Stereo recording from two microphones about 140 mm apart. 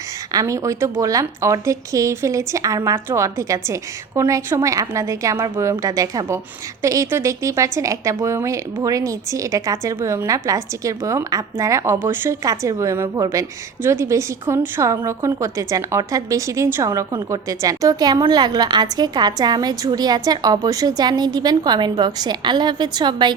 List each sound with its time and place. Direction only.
0.3 s a woman's voice: 20° right (ahead or behind)